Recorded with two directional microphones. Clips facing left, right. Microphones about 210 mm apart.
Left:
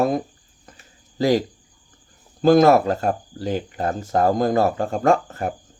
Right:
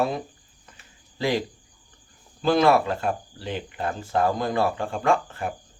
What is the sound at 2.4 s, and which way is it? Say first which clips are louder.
Speech: left 6 dB; 45° left (ahead or behind).